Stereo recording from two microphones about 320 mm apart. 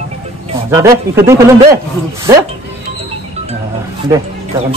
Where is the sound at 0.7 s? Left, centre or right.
Centre.